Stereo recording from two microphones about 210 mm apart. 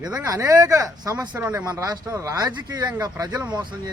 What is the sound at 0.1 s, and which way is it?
Speech, 15° right (ahead or behind).